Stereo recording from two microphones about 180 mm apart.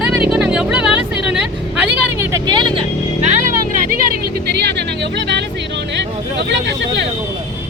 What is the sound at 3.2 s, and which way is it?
Music, 40° right (ahead or behind).